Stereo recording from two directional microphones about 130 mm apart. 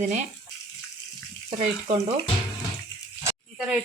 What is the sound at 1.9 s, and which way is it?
Speech, 55° right (ahead or behind).